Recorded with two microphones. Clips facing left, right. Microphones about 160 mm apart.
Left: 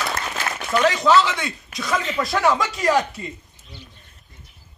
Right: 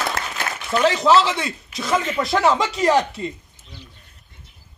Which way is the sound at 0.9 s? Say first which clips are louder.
Right 2 dB; 30° right (ahead or behind).